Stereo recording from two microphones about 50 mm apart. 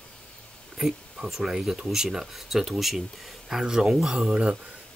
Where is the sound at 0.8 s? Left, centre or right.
Centre.